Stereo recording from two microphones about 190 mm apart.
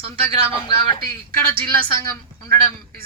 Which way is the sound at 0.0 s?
30° right (ahead or behind).